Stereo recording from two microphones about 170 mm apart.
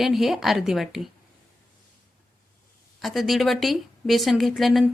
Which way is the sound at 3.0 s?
Centre (ahead or behind).